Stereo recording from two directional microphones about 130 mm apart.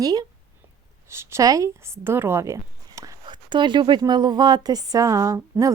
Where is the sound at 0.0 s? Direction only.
30° right (ahead or behind).